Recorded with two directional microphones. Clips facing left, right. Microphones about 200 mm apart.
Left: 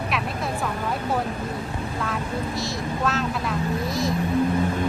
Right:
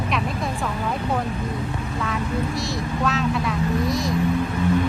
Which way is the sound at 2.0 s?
Centre (ahead or behind).